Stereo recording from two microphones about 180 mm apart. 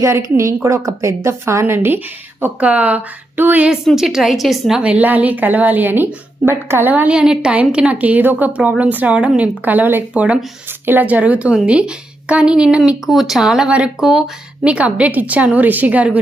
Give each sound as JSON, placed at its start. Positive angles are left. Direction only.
{"t": 0.0, "sound": "a woman's voice", "side_deg": -15}